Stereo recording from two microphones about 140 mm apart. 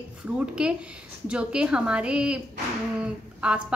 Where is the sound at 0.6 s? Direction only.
5° right (ahead or behind).